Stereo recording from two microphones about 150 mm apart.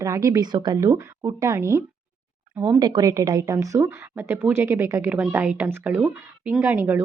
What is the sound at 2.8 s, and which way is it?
Speech, 30° right (ahead or behind).